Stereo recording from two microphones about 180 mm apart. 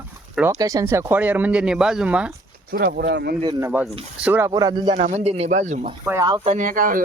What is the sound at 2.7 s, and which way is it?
Speech, 60° right (ahead or behind).